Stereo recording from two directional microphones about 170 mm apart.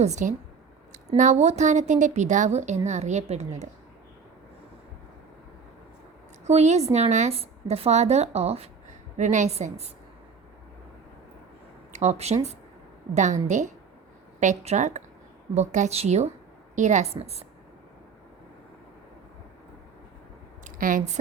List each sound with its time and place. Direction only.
0.0 s a woman's voice: 45° right (ahead or behind)
6.4 s a woman's voice: 40° right (ahead or behind)
11.9 s a woman's voice: 40° right (ahead or behind)
20.7 s speech: 50° right (ahead or behind)